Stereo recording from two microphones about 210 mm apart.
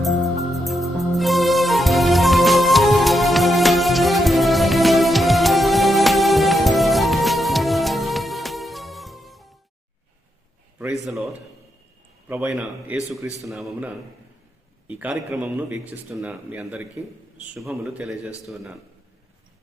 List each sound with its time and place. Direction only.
0.0 s music: centre (ahead or behind)
10.8 s a sound: centre (ahead or behind)
12.3 s a man's voice: 5° right (ahead or behind)